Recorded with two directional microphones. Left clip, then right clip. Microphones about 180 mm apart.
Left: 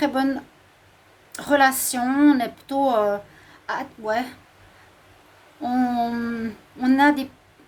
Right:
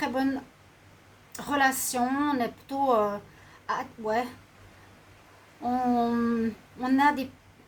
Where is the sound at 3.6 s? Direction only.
60° left (ahead or behind).